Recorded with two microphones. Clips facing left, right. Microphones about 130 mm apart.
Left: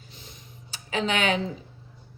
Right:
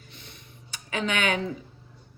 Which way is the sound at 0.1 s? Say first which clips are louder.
Even; 60° right (ahead or behind).